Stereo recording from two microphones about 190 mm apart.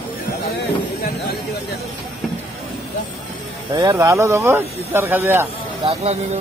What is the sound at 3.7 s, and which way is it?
Speech, 20° right (ahead or behind).